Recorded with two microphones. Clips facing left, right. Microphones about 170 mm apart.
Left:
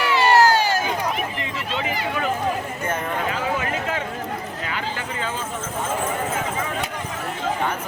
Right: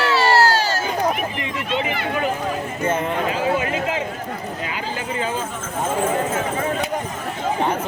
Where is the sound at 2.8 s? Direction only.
20° right (ahead or behind).